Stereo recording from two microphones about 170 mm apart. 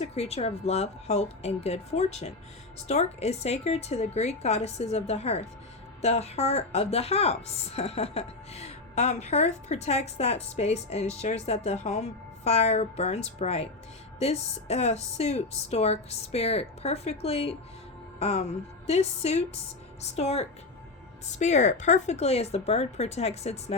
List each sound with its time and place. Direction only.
0.0 s a woman's voice: 35° left (ahead or behind)